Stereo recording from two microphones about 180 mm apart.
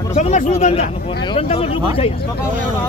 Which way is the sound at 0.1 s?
40° left (ahead or behind).